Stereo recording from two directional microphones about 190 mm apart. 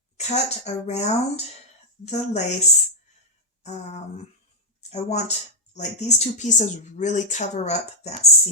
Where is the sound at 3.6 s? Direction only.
35° left (ahead or behind).